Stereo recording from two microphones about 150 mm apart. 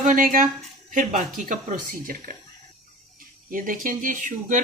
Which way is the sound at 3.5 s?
65° right (ahead or behind).